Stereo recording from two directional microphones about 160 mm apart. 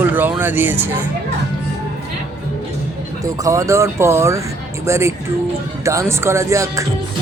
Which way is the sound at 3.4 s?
20° right (ahead or behind).